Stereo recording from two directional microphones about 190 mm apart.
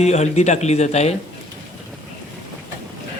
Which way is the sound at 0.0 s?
35° left (ahead or behind).